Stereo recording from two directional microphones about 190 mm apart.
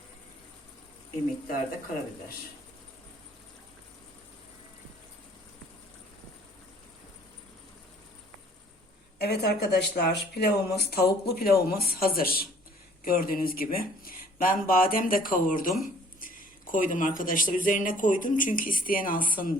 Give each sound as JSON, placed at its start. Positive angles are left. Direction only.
{"t": 9.1, "sound": "speech", "side_deg": 60}